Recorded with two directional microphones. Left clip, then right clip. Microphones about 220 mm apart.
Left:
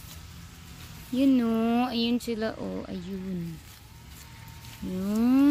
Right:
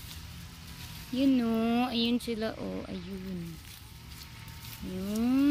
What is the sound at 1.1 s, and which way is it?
Speech, 25° left (ahead or behind).